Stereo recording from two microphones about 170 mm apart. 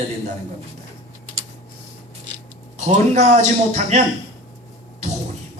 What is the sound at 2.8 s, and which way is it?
A man's voice, 45° right (ahead or behind).